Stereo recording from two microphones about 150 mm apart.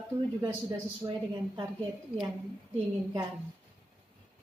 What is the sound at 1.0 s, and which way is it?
Speech, 30° right (ahead or behind).